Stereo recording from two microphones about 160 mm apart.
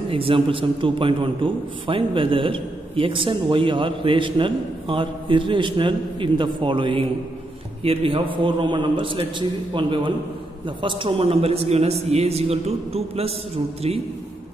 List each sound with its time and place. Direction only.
0.1 s a man's voice: 35° right (ahead or behind)